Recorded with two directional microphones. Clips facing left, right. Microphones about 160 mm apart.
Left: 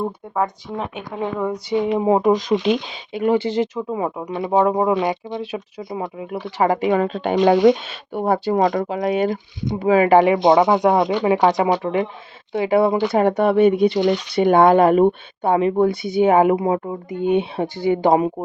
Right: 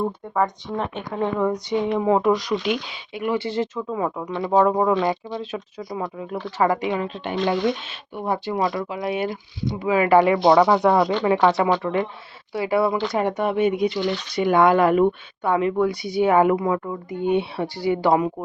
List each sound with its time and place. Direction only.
0.0 s speech: 5° left (ahead or behind)
1.9 s speech: 20° left (ahead or behind)
6.9 s speech: 55° left (ahead or behind)
7.4 s speech: 65° left (ahead or behind)
8.1 s speech: 50° left (ahead or behind)
9.7 s speech: 30° left (ahead or behind)
10.1 s speech: 20° left (ahead or behind)
13.9 s speech: 50° left (ahead or behind)
14.3 s speech: 30° left (ahead or behind)